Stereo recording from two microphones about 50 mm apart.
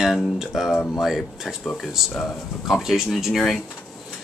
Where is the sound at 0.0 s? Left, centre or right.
Centre.